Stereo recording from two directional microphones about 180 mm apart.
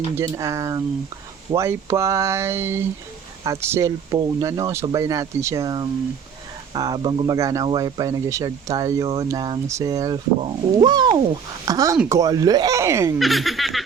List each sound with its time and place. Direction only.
0.2 s speech: 15° right (ahead or behind)
13.1 s speech: centre (ahead or behind)